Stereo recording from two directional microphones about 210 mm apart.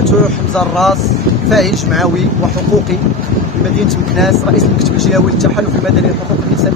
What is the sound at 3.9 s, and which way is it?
Speech, centre (ahead or behind).